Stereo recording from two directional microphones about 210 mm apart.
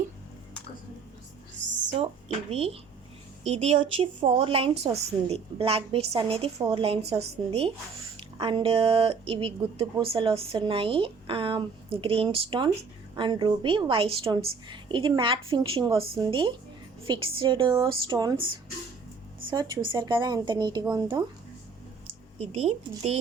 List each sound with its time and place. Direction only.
2.5 s speech: 30° right (ahead or behind)
22.4 s speech: 30° right (ahead or behind)